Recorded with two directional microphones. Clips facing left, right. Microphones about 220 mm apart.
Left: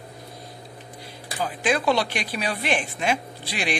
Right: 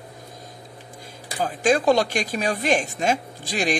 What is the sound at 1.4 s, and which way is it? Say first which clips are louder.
A woman's voice: right 4 dB; 45° right (ahead or behind).